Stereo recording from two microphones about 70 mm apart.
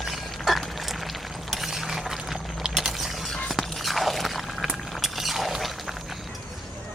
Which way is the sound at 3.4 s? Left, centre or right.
Centre.